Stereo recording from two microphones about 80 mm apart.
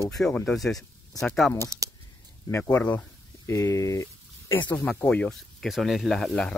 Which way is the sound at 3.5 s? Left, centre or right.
Left.